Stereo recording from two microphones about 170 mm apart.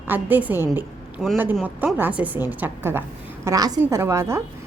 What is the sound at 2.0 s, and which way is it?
A woman's voice, 10° right (ahead or behind).